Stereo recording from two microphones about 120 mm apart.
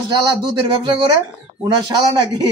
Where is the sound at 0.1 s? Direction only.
35° right (ahead or behind).